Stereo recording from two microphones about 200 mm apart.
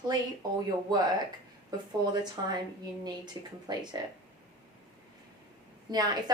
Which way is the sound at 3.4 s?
15° right (ahead or behind).